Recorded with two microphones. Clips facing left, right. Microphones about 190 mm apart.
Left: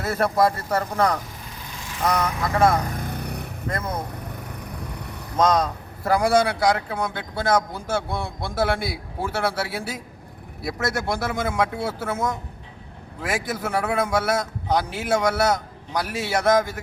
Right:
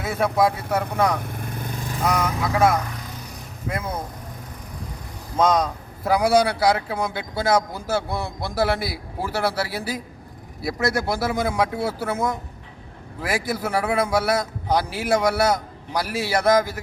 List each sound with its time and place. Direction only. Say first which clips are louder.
0.0 s speech: even; centre (ahead or behind)
1.2 s vehicle: right 7 dB; 55° right (ahead or behind)
2.0 s speech: even; 5° right (ahead or behind)
2.9 s vehicle: left 6 dB; 55° left (ahead or behind)
3.7 s speech: right 1 dB; 5° right (ahead or behind)
5.4 s speech: even; centre (ahead or behind)